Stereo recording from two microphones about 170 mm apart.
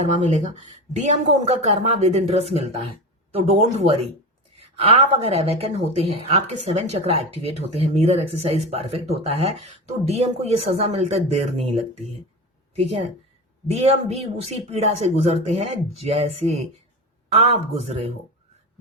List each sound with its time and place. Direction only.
0.0 s speech: 45° right (ahead or behind)
12.7 s a woman's voice: 35° right (ahead or behind)